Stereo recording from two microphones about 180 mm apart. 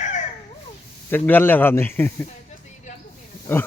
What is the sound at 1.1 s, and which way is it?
Speech, 10° left (ahead or behind).